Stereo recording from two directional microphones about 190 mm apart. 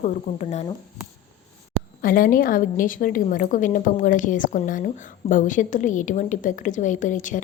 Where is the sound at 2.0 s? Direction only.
45° left (ahead or behind).